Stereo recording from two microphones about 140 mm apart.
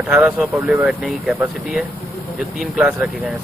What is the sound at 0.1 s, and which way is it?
Speech, 5° right (ahead or behind).